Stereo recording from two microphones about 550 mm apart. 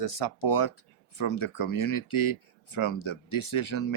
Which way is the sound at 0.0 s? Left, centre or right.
Left.